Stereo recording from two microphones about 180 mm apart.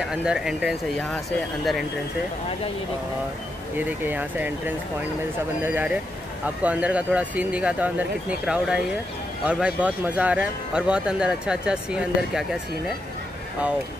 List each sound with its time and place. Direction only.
0.1 s speech: 5° right (ahead or behind)
3.7 s speech: 10° right (ahead or behind)